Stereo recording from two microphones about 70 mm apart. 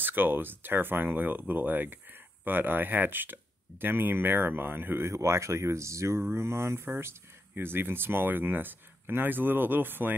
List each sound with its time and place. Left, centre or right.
0.0 s speech: right